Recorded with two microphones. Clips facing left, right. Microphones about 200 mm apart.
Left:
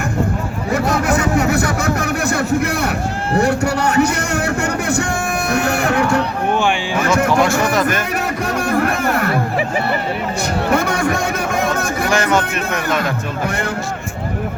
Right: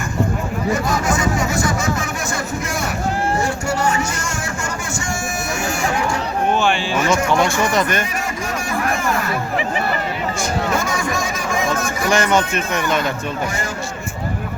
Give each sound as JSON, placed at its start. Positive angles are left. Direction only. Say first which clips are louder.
{"t": 0.7, "sound": "speech", "louder": "left 4 dB", "side_deg": 60}
{"t": 5.5, "sound": "music", "louder": "left 5 dB", "side_deg": 60}
{"t": 7.3, "sound": "speech", "louder": "left 2 dB", "side_deg": 5}
{"t": 8.6, "sound": "a sound", "louder": "left 4 dB", "side_deg": 60}
{"t": 10.7, "sound": "speech", "louder": "left 4 dB", "side_deg": 60}
{"t": 12.0, "sound": "speech", "louder": "right 1 dB", "side_deg": 0}